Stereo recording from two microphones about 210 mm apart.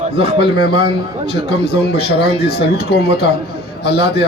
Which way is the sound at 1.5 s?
50° left (ahead or behind).